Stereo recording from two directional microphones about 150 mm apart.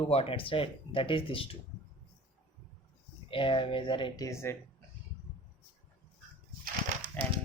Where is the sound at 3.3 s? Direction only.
35° left (ahead or behind); by 4.5 s 20° left (ahead or behind).